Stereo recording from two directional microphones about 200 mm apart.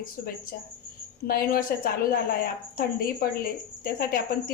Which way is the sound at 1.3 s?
45° left (ahead or behind).